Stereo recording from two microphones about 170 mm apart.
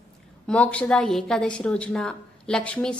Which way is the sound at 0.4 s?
5° left (ahead or behind).